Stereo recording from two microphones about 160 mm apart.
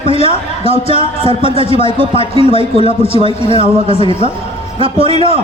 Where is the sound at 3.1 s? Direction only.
35° right (ahead or behind).